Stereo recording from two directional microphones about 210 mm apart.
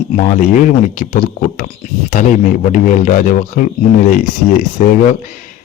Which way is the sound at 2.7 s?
40° left (ahead or behind).